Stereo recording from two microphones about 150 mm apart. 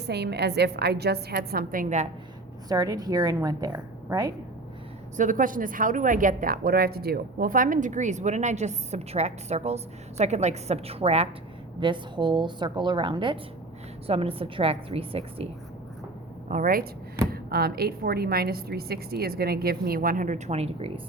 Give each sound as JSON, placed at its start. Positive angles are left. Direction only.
{"t": 0.0, "sound": "a woman's voice", "side_deg": -90}
{"t": 2.6, "sound": "a woman's voice", "side_deg": -25}
{"t": 5.1, "sound": "a woman's voice", "side_deg": -60}
{"t": 11.8, "sound": "a woman's voice", "side_deg": -30}
{"t": 16.5, "sound": "a woman's voice", "side_deg": -65}
{"t": 17.3, "sound": "a woman's voice", "side_deg": -90}